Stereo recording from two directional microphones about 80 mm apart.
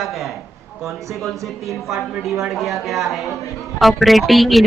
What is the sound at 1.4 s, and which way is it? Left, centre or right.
A woman's voice, centre.